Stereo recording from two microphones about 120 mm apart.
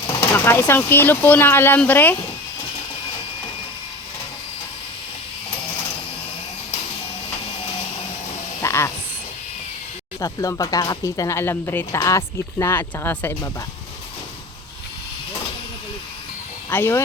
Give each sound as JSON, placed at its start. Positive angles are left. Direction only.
{"t": 0.3, "sound": "speech", "side_deg": 20}
{"t": 8.6, "sound": "a sound", "side_deg": 25}
{"t": 10.2, "sound": "speech", "side_deg": 30}
{"t": 16.6, "sound": "speech", "side_deg": 20}